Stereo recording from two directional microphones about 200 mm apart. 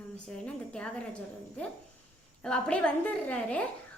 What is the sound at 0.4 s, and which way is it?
Speech, 5° left (ahead or behind).